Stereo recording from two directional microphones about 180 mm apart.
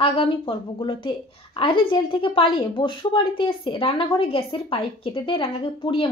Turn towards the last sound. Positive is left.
turn(degrees=30)  # may be behind; listen again after turning